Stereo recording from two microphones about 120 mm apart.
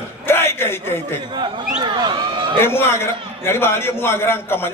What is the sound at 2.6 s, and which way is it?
A man's voice, 20° left (ahead or behind).